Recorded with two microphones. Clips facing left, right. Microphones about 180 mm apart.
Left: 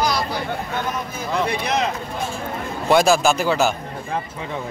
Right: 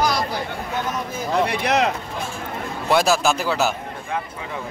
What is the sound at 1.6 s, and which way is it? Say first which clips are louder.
Speech: right 3 dB; 70° right (ahead or behind).